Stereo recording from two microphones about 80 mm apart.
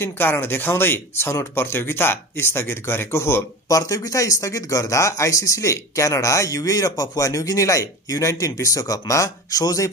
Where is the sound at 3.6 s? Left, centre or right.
Left.